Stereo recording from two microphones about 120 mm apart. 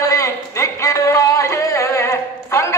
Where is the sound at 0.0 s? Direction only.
25° left (ahead or behind).